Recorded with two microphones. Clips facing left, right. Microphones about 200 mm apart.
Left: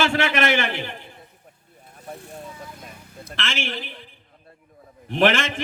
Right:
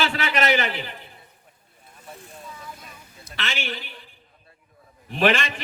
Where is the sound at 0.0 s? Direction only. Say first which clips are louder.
Left 3 dB; 50° left (ahead or behind).